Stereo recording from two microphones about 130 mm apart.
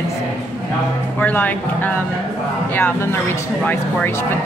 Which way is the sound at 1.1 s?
15° left (ahead or behind).